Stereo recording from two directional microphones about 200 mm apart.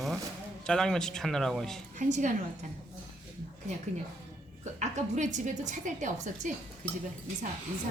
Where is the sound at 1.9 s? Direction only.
40° right (ahead or behind).